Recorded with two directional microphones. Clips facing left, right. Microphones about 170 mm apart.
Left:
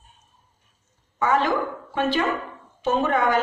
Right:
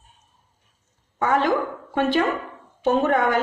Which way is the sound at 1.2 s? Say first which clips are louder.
Right 1 dB; 55° right (ahead or behind).